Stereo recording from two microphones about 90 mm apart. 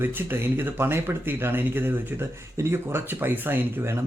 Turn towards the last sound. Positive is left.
turn(degrees=-20)  # may be behind; listen again after turning